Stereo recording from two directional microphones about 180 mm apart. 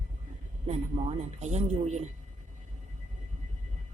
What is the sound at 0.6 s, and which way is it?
A woman's voice, 35° right (ahead or behind).